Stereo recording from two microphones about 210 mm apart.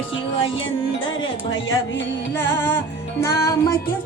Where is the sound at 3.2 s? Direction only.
15° left (ahead or behind).